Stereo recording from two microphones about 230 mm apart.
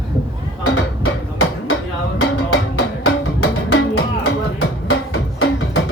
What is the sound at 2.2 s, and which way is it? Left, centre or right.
Music, left.